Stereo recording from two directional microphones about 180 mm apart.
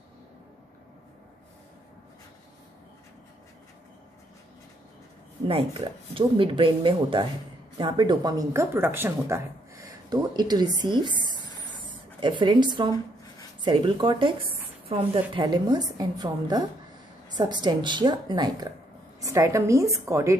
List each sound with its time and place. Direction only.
5.5 s a woman's voice: 30° right (ahead or behind)